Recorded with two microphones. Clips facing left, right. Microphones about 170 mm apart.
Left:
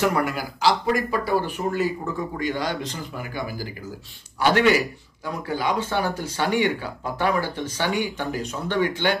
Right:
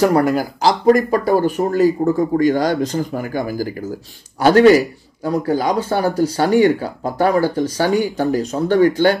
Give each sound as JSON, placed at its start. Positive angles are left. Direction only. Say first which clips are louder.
{"t": 0.0, "sound": "a man's voice", "louder": "right 8 dB", "side_deg": -40}